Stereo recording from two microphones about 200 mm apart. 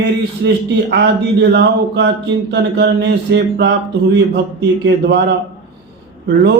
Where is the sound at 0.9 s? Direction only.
60° right (ahead or behind).